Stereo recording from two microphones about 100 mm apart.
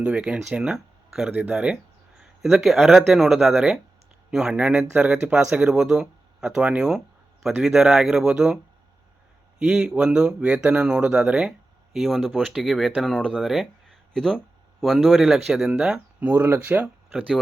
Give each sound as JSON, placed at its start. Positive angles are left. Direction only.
{"t": 0.0, "sound": "speech", "side_deg": -10}
{"t": 9.6, "sound": "speech", "side_deg": -10}
{"t": 16.3, "sound": "speech", "side_deg": -25}
{"t": 17.1, "sound": "speech", "side_deg": -5}